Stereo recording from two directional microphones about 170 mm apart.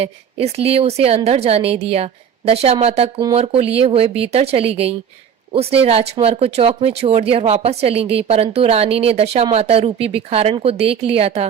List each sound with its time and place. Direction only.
0.0 s speech: 35° right (ahead or behind)